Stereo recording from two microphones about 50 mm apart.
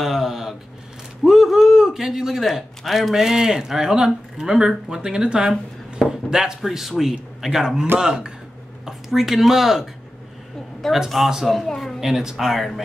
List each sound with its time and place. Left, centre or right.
0.0 s a sound: centre
1.2 s a man's voice: centre
10.9 s speech: centre
12.0 s speech: centre